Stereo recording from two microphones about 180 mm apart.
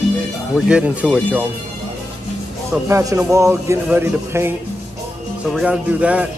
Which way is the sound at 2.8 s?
15° right (ahead or behind).